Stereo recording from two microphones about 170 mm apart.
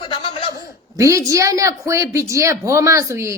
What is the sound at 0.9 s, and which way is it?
A woman's voice, 20° right (ahead or behind).